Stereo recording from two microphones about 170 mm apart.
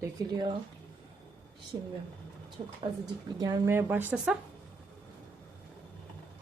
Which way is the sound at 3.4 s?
25° right (ahead or behind).